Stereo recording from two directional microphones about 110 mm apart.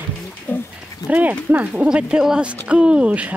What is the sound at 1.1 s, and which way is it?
Speech, 15° right (ahead or behind).